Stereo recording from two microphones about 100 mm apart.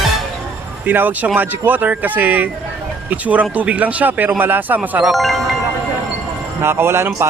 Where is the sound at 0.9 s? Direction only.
15° right (ahead or behind).